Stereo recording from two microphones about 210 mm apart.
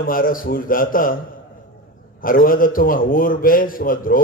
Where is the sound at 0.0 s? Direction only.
40° left (ahead or behind).